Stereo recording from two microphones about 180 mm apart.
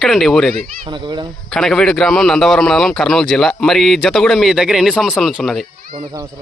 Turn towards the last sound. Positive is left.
turn(degrees=0)  # may be behind; listen again after turning